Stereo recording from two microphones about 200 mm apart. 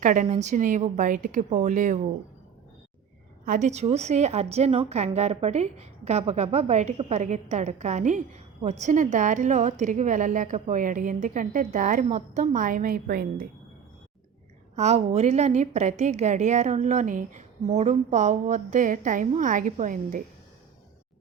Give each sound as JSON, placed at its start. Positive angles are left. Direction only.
{"t": 0.0, "sound": "a woman's voice", "side_deg": -40}
{"t": 3.4, "sound": "a woman's voice", "side_deg": -40}
{"t": 14.8, "sound": "a woman's voice", "side_deg": -35}